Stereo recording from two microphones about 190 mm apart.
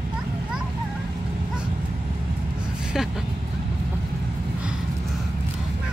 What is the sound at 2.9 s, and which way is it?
Speech, centre (ahead or behind).